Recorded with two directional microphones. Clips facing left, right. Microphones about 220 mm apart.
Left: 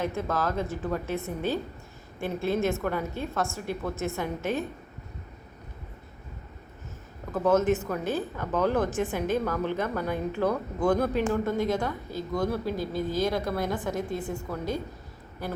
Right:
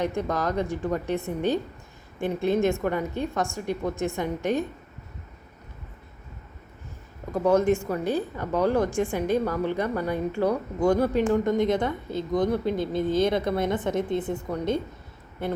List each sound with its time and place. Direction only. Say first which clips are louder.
0.3 s speech: right 2 dB; 15° right (ahead or behind)
7.3 s speech: right 2 dB; 10° right (ahead or behind)
7.6 s speech: right 2 dB; 5° left (ahead or behind)
8.0 s speech: right 3 dB; 15° right (ahead or behind)